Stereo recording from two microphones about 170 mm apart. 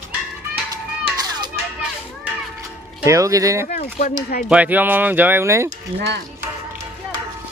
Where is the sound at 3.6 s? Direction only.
50° left (ahead or behind).